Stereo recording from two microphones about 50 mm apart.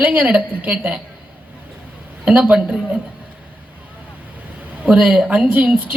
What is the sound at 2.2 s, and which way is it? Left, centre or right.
Speech, right.